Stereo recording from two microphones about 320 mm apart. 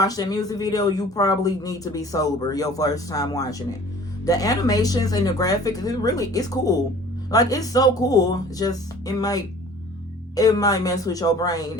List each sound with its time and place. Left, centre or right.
0.0 s speech: centre